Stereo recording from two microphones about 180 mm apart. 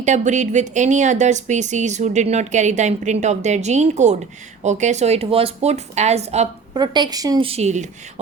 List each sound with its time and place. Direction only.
0.0 s speech: 40° right (ahead or behind)
6.7 s a woman's voice: 25° right (ahead or behind)
7.4 s speech: 35° right (ahead or behind)